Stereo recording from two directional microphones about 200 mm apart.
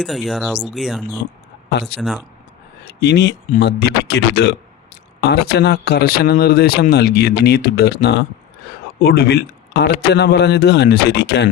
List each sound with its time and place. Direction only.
0.0 s speech: centre (ahead or behind)
2.8 s a man's voice: 55° left (ahead or behind)